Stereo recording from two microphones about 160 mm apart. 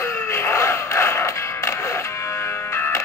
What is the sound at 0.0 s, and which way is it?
Music, 15° left (ahead or behind).